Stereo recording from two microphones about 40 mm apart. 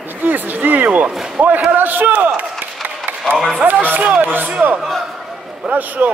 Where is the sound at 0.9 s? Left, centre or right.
Right.